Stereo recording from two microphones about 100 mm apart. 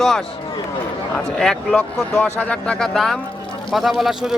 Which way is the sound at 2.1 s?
20° left (ahead or behind).